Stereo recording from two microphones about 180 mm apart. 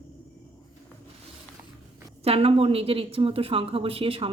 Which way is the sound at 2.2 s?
35° right (ahead or behind).